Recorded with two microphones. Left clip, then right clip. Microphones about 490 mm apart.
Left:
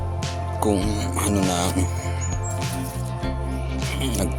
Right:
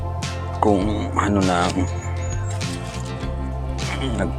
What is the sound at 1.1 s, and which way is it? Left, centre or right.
Speech, left.